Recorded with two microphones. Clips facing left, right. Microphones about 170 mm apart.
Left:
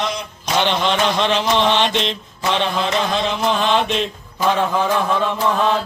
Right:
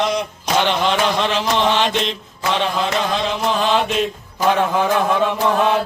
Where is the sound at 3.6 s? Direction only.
5° right (ahead or behind).